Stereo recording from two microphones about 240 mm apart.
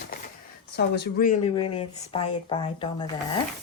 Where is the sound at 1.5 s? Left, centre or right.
Left.